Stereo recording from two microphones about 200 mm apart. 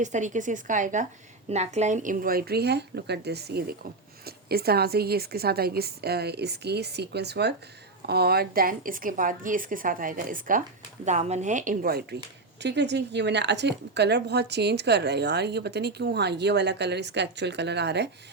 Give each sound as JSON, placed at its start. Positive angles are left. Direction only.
{"t": 0.0, "sound": "a woman's voice", "side_deg": -35}
{"t": 12.6, "sound": "a woman's voice", "side_deg": -60}